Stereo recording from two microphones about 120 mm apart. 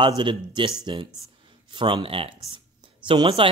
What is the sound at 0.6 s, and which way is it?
Speech, 40° right (ahead or behind).